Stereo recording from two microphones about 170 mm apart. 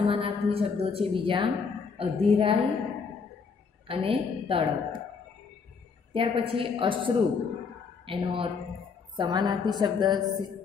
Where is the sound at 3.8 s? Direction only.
35° right (ahead or behind).